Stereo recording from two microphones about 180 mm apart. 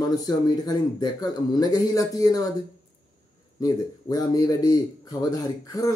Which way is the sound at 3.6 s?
20° left (ahead or behind).